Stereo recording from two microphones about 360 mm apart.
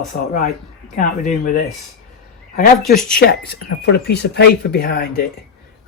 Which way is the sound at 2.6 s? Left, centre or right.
Left.